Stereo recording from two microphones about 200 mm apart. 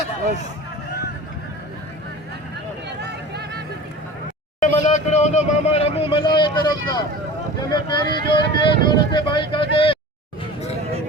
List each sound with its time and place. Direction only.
3.0 s vehicle: 55° right (ahead or behind)
4.6 s speech: 35° left (ahead or behind)